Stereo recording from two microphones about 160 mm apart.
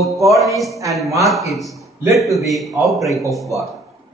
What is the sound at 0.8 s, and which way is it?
A man's voice, centre (ahead or behind).